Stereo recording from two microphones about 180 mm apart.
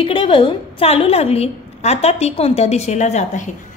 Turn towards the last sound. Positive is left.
turn(degrees=40)  # may be behind; listen again after turning